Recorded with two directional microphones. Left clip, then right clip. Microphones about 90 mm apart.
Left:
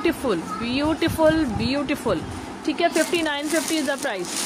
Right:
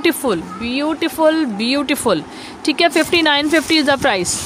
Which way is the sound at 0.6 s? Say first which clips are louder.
Right 4 dB; 65° right (ahead or behind).